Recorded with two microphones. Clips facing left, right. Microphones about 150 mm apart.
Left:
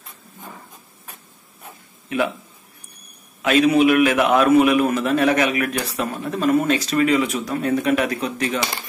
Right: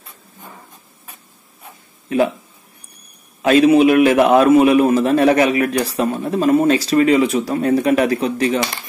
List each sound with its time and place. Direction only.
2.0 s speech: 35° right (ahead or behind)
3.4 s a man's voice: 35° right (ahead or behind)